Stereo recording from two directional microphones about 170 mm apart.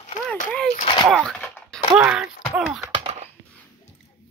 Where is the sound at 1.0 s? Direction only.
5° right (ahead or behind).